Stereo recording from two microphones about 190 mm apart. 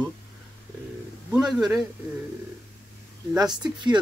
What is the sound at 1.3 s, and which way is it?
Speech, 5° right (ahead or behind).